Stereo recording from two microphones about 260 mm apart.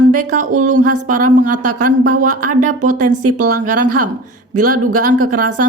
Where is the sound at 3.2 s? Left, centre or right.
Right.